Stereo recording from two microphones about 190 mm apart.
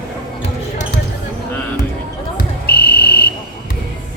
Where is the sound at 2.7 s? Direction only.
55° left (ahead or behind).